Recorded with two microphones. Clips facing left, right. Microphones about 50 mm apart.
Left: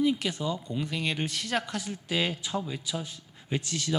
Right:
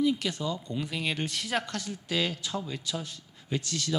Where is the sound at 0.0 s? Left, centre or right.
Left.